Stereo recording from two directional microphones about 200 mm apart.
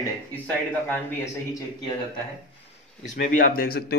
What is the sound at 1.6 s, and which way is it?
Speech, 20° left (ahead or behind).